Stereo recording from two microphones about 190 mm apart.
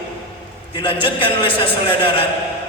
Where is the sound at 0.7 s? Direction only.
25° left (ahead or behind).